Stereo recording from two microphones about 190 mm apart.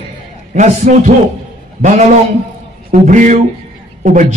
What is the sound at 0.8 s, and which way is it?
Speech, 40° right (ahead or behind).